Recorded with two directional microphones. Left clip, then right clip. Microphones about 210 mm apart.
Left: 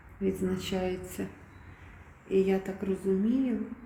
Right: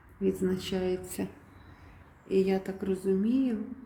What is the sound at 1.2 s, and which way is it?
Speech, 25° right (ahead or behind).